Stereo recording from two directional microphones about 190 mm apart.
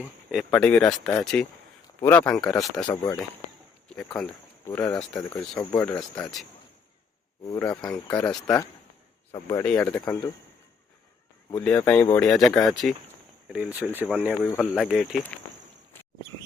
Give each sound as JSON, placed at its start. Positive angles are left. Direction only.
{"t": 0.0, "sound": "speech", "side_deg": -5}
{"t": 0.5, "sound": "speech", "side_deg": 5}
{"t": 2.9, "sound": "speech", "side_deg": 15}
{"t": 3.8, "sound": "speech", "side_deg": 5}
{"t": 7.4, "sound": "speech", "side_deg": 15}
{"t": 8.2, "sound": "speech", "side_deg": 5}
{"t": 8.4, "sound": "speech", "side_deg": 15}
{"t": 11.5, "sound": "speech", "side_deg": 5}
{"t": 14.4, "sound": "speech", "side_deg": 5}